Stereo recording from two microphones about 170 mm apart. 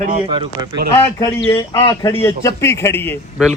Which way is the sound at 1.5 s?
20° left (ahead or behind).